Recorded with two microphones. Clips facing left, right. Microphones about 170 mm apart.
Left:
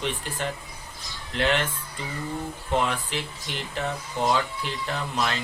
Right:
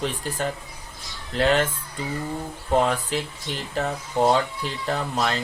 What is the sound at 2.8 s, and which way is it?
Speech, 40° right (ahead or behind).